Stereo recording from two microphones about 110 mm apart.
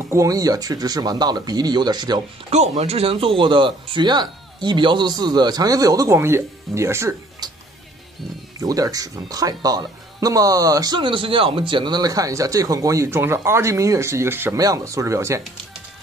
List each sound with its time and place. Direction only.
0.1 s speech: 30° right (ahead or behind)
2.5 s speech: 90° right; by 6.1 s 35° right (ahead or behind)
6.1 s speech: 20° right (ahead or behind)
8.5 s speech: 35° right (ahead or behind)
11.0 s speech: 50° right (ahead or behind); by 14.6 s 20° right (ahead or behind)
14.6 s speech: 30° right (ahead or behind)